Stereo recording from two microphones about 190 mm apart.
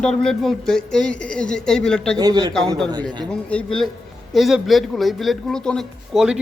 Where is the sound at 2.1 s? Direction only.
20° right (ahead or behind).